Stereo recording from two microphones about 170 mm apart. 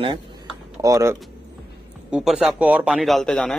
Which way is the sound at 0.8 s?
20° right (ahead or behind).